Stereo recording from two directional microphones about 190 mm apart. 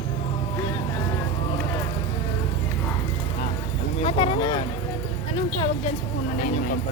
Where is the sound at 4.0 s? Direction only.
30° left (ahead or behind).